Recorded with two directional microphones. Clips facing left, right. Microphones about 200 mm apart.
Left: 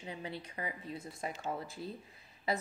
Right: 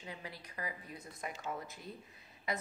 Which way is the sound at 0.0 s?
25° left (ahead or behind).